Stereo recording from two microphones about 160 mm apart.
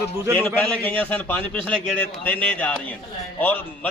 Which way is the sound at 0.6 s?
10° left (ahead or behind).